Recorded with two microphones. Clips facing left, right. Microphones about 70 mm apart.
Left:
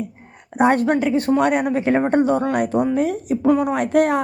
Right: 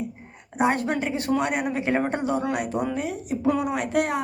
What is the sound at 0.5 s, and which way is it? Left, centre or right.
Speech, left.